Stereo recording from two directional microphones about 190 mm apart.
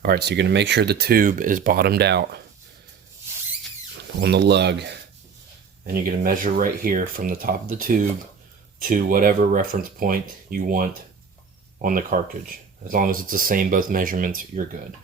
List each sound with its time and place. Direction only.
0.0 s speech: 55° right (ahead or behind)
4.2 s speech: 60° right (ahead or behind)
5.9 s speech: 50° right (ahead or behind)